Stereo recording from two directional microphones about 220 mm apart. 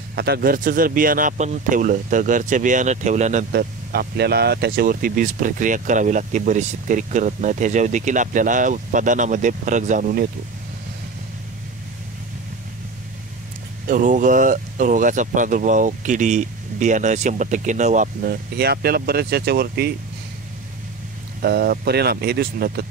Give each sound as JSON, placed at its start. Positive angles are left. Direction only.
{"t": 0.1, "sound": "speech", "side_deg": -45}
{"t": 3.5, "sound": "speech", "side_deg": -45}
{"t": 13.8, "sound": "speech", "side_deg": -35}
{"t": 21.4, "sound": "speech", "side_deg": -45}